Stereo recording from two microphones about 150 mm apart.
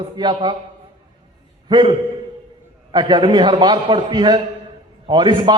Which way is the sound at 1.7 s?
30° right (ahead or behind).